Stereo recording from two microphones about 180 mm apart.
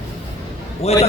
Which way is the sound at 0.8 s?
35° left (ahead or behind).